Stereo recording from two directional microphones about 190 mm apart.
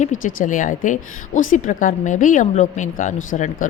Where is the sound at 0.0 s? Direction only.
45° left (ahead or behind).